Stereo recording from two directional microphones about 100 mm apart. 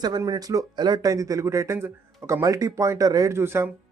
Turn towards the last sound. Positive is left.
turn(degrees=-25)  # may be behind; listen again after turning